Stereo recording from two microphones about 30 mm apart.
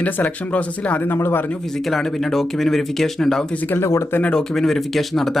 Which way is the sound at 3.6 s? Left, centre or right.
Left.